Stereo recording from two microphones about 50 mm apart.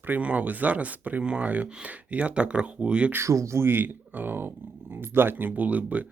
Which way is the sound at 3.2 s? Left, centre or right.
Right.